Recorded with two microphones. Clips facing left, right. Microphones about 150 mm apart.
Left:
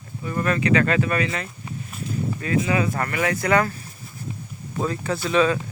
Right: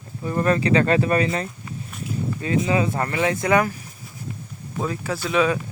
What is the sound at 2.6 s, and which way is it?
Speech, 25° right (ahead or behind).